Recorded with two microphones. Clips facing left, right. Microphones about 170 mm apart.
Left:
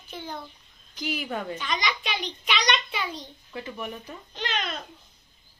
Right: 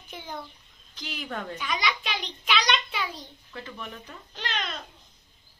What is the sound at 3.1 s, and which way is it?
A woman's voice, 15° left (ahead or behind).